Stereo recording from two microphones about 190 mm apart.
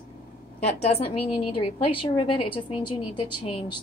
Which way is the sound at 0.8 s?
30° left (ahead or behind).